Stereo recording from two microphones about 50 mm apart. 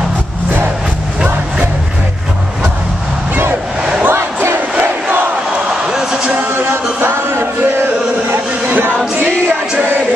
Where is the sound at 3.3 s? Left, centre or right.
Right.